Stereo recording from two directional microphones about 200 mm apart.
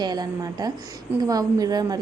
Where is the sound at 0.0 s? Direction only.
20° right (ahead or behind).